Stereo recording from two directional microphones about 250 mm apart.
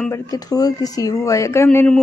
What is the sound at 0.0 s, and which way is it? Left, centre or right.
Speech, centre.